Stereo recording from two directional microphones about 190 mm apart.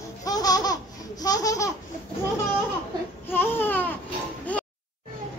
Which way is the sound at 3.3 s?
10° left (ahead or behind).